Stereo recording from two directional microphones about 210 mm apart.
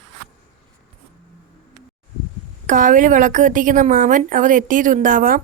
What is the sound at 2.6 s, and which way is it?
A woman's voice, 40° right (ahead or behind).